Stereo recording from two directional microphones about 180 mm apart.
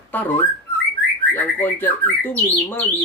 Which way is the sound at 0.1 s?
10° left (ahead or behind).